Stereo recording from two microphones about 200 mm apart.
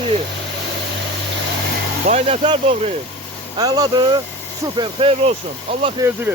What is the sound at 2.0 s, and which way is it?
Speech, 35° right (ahead or behind).